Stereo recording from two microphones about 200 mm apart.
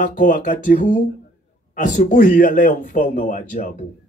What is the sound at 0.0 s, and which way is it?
A man's voice, 40° left (ahead or behind).